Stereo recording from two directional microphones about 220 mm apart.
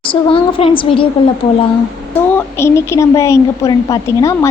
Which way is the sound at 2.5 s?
10° left (ahead or behind).